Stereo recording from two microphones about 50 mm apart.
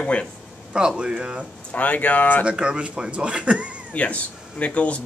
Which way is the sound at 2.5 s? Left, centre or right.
Right.